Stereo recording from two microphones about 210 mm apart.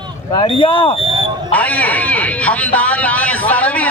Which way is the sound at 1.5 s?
5° left (ahead or behind).